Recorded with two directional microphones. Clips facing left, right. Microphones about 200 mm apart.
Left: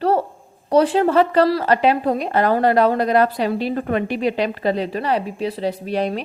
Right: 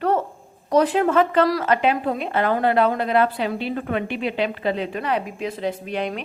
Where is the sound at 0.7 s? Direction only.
30° left (ahead or behind).